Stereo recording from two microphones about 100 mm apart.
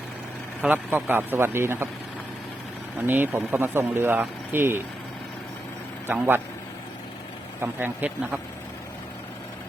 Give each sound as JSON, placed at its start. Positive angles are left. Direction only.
{"t": 0.6, "sound": "speech", "side_deg": -15}
{"t": 3.0, "sound": "speech", "side_deg": -20}
{"t": 6.1, "sound": "speech", "side_deg": -20}
{"t": 7.6, "sound": "speech", "side_deg": -20}